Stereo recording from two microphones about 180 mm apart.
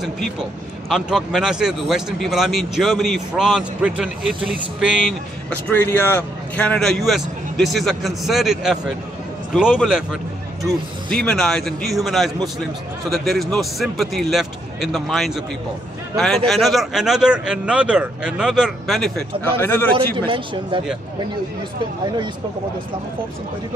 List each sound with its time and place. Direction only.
0.8 s a man's voice: centre (ahead or behind)
5.5 s a man's voice: 10° left (ahead or behind)
16.4 s a man's voice: centre (ahead or behind)
19.6 s a man's voice: 10° left (ahead or behind)
20.2 s speech: 30° right (ahead or behind)